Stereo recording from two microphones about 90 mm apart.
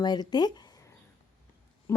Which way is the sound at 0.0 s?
50° left (ahead or behind).